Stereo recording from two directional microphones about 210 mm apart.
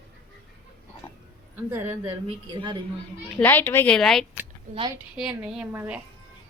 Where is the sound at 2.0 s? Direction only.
25° right (ahead or behind).